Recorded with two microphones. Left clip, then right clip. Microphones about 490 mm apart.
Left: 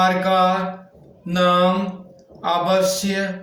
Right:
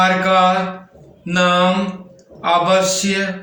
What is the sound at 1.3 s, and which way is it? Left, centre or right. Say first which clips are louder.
Mantra: right 2 dB; left.